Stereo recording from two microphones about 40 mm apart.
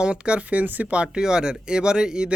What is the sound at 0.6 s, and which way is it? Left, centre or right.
Speech, right.